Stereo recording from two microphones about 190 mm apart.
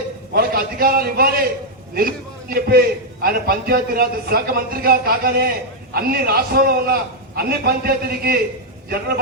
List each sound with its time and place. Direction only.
0.3 s a man's voice: 55° right (ahead or behind)